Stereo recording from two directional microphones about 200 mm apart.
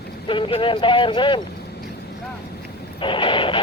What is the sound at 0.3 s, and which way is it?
Speech, 25° left (ahead or behind).